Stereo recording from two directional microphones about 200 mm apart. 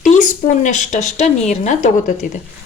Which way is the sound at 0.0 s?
40° left (ahead or behind).